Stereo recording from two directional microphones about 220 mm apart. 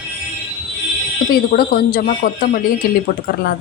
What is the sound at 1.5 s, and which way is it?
Speech, 40° left (ahead or behind).